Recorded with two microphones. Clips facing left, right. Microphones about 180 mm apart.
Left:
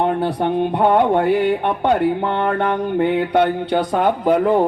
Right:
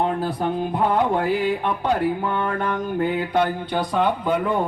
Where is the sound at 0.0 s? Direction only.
70° left (ahead or behind).